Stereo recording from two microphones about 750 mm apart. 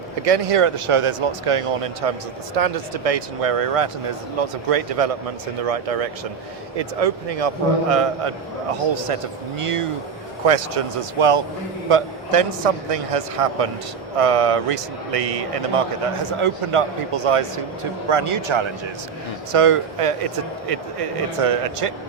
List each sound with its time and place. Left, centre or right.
0.3 s speech: right
9.6 s a man's voice: right